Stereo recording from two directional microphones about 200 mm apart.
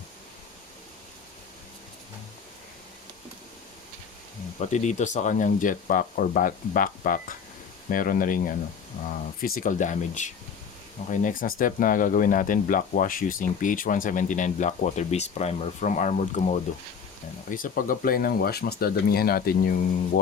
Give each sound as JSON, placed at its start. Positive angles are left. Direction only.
{"t": 4.7, "sound": "speech", "side_deg": 35}
{"t": 9.6, "sound": "speech", "side_deg": 40}